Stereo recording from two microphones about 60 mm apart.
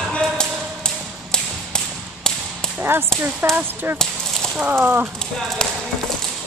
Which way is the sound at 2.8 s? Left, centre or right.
Right.